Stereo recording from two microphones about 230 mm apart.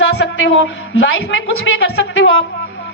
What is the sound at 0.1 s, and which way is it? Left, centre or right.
A woman's voice, left.